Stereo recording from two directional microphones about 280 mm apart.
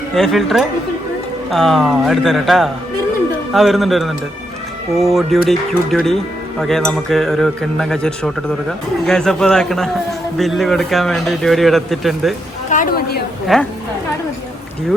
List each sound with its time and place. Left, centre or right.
0.2 s a man's voice: centre
12.7 s a woman's voice: left
13.5 s a man's voice: centre